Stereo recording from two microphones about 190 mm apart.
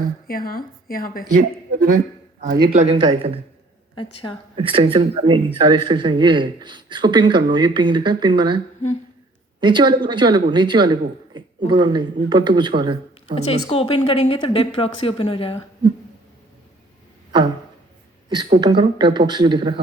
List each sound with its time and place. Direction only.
0.3 s a woman's voice: 50° left (ahead or behind)
1.3 s a man's voice: 45° right (ahead or behind)
2.6 s a man's voice: 30° right (ahead or behind)
3.9 s speech: 25° left (ahead or behind)
4.5 s a man's voice: 30° right (ahead or behind)
13.3 s speech: 30° left (ahead or behind)
17.3 s a sound: 25° right (ahead or behind)
18.6 s a man's voice: 25° right (ahead or behind)